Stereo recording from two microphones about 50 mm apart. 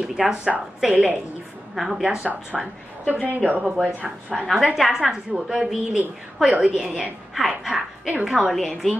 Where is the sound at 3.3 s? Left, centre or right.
Right.